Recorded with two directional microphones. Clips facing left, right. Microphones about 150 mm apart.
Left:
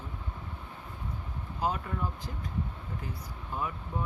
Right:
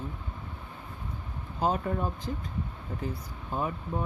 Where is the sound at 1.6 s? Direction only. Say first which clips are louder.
Right 4 dB; 35° right (ahead or behind).